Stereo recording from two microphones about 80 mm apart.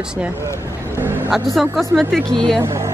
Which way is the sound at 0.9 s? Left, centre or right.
Right.